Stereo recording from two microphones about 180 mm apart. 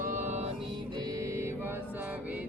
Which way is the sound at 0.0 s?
45° right (ahead or behind).